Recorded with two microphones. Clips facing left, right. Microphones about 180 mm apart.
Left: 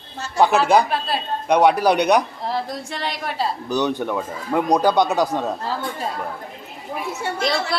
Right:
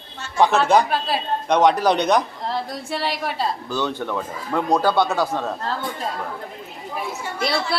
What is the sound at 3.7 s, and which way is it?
Speech, 15° left (ahead or behind).